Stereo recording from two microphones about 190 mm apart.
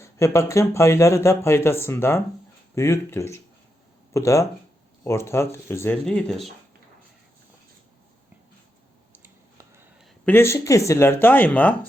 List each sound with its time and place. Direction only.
0.0 s speech: 15° left (ahead or behind)
9.1 s a sound: 10° right (ahead or behind)
10.2 s speech: 15° left (ahead or behind)